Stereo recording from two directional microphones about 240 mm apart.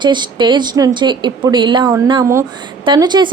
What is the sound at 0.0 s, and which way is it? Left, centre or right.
A woman's voice, centre.